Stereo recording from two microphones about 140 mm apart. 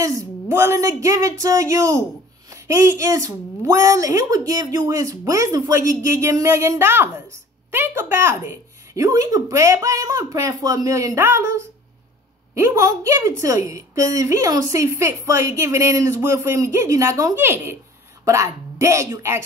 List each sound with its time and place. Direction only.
0.0 s a woman's voice: 20° right (ahead or behind)